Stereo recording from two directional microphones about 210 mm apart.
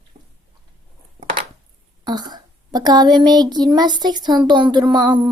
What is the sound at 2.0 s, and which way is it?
A child's voice, 20° right (ahead or behind).